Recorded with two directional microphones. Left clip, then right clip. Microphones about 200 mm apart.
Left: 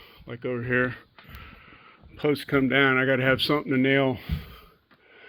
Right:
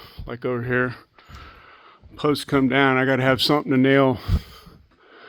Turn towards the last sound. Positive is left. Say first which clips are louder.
# right 6 dB
turn(degrees=-35)  # may be behind; listen again after turning